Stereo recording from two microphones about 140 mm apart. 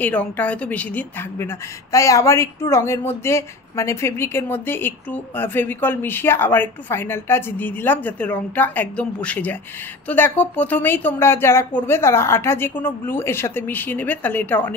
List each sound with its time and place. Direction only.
0.0 s speech: 10° left (ahead or behind)
1.9 s speech: 20° left (ahead or behind)